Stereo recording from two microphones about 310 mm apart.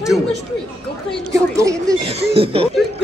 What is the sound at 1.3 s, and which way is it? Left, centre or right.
Speech, centre.